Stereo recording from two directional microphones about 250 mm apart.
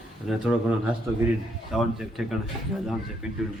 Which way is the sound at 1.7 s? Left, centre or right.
Centre.